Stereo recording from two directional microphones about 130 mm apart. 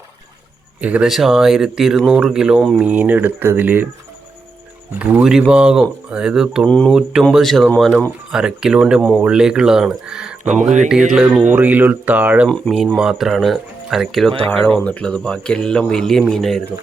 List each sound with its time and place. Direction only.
0.8 s speech: 10° right (ahead or behind)
2.8 s speech: 10° right (ahead or behind)
4.9 s speech: 15° right (ahead or behind)
6.7 s a man's voice: 5° left (ahead or behind)
6.9 s speech: 5° right (ahead or behind)
10.4 s speech: 65° right (ahead or behind)
11.1 s speech: 5° right (ahead or behind)
12.5 s a man's voice: 5° left (ahead or behind)